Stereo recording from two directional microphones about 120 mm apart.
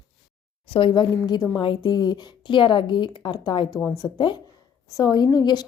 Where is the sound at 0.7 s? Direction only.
45° left (ahead or behind).